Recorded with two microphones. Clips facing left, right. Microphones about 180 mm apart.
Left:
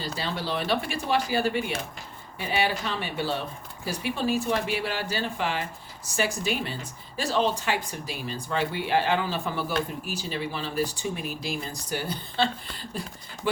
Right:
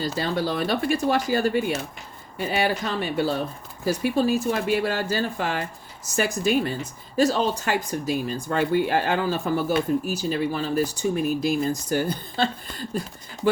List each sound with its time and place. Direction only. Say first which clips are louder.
0.0 s speech: right 6 dB; 45° right (ahead or behind)